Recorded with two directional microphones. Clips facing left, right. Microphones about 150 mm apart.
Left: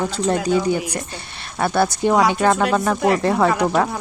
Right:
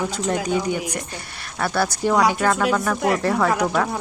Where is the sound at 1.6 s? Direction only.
20° left (ahead or behind).